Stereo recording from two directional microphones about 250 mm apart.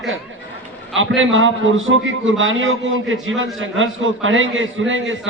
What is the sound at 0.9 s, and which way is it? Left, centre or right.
A man's voice, right.